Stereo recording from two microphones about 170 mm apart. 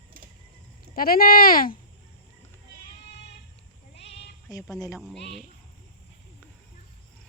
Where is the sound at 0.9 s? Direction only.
60° left (ahead or behind).